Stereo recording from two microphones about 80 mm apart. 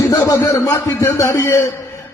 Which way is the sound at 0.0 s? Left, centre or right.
Left.